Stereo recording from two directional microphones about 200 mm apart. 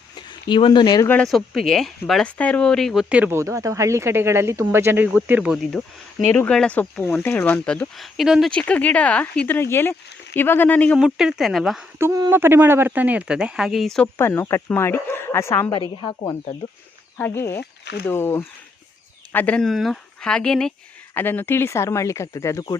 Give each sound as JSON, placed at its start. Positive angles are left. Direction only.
{"t": 0.3, "sound": "speech", "side_deg": 25}
{"t": 1.0, "sound": "speech", "side_deg": 5}
{"t": 11.9, "sound": "speech", "side_deg": -15}
{"t": 16.0, "sound": "speech", "side_deg": 25}
{"t": 17.2, "sound": "speech", "side_deg": 10}